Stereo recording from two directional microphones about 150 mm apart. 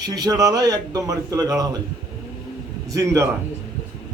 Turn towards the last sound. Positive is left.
turn(degrees=-20)  # may be behind; listen again after turning